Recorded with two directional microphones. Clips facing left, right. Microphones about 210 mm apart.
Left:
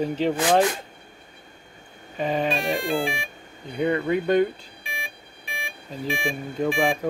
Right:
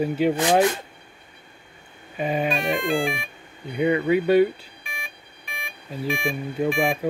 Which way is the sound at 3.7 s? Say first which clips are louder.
Right 3 dB; 10° right (ahead or behind).